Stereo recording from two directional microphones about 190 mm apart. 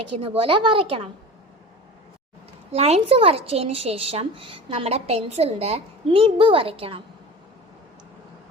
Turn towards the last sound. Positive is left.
turn(degrees=-30)  # may be behind; listen again after turning